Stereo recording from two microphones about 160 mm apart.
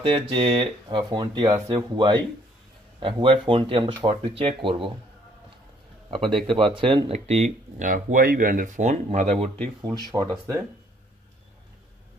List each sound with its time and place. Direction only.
0.0 s speech: 35° right (ahead or behind)
6.0 s a man's voice: 30° right (ahead or behind)